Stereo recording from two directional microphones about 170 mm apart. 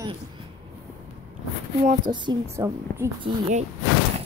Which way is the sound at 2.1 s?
25° right (ahead or behind).